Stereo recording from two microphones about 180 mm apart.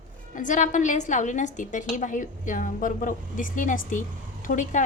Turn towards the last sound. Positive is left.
turn(degrees=45)  # may be behind; listen again after turning